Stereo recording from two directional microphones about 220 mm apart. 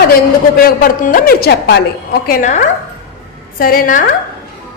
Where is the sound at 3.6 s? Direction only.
40° left (ahead or behind).